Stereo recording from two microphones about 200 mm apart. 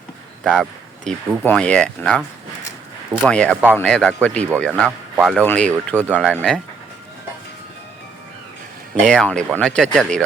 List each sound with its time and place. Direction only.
0.4 s a man's voice: centre (ahead or behind)
4.7 s a man's voice: 10° right (ahead or behind)
9.0 s a man's voice: 5° left (ahead or behind)